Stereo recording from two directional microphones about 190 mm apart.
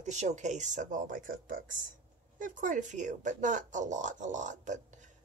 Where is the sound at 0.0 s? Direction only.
35° right (ahead or behind).